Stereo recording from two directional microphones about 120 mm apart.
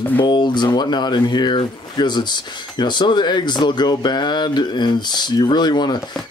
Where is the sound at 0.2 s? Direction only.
40° left (ahead or behind).